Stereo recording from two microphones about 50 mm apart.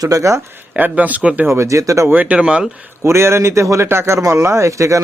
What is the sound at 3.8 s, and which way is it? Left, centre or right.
Speech, right.